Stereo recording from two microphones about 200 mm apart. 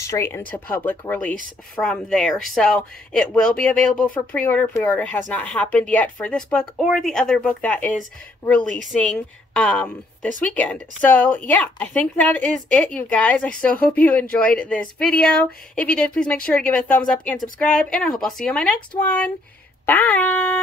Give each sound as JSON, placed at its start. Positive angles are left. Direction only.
{"t": 0.0, "sound": "a woman's voice", "side_deg": 15}